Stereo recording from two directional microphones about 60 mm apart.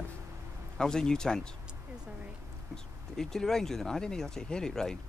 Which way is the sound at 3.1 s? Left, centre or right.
Centre.